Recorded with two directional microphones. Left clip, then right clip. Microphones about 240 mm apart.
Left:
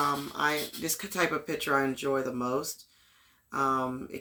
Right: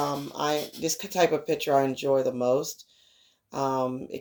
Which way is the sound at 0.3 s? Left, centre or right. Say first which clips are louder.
Right 1 dB; left.